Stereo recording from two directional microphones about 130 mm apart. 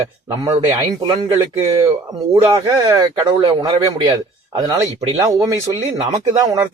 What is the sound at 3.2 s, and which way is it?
Speech, 35° right (ahead or behind).